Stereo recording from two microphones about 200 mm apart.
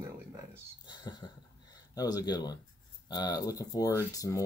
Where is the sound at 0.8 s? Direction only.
20° left (ahead or behind).